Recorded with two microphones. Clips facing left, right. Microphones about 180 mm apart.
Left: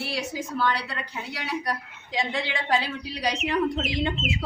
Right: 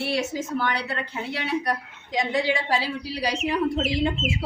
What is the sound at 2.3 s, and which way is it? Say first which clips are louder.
A woman's voice: right 3 dB; 10° right (ahead or behind).